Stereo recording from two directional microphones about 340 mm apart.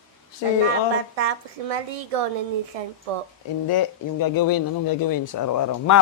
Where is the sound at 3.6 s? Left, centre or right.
Left.